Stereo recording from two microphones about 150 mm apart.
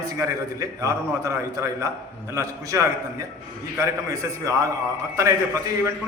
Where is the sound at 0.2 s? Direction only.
20° right (ahead or behind).